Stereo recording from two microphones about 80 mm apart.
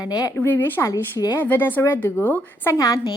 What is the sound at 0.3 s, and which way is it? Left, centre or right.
Speech, left.